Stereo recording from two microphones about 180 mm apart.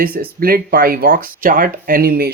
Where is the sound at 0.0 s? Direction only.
55° right (ahead or behind).